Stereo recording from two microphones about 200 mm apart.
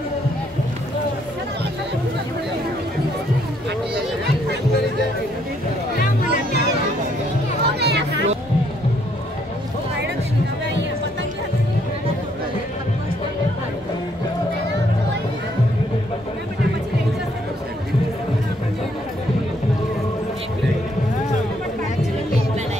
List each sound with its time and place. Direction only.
7.6 s music: 55° right (ahead or behind)